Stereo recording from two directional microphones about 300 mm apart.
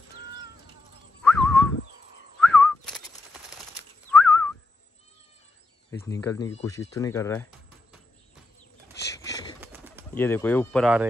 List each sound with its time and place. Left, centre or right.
1.3 s a sound: centre
2.4 s whistling: centre
4.1 s whistling: centre
5.9 s speech: centre
9.6 s bird: centre
10.1 s speech: centre